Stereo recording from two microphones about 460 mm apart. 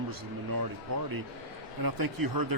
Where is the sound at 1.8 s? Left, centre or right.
Right.